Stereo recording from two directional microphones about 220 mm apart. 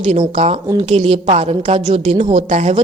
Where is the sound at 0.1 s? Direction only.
30° right (ahead or behind).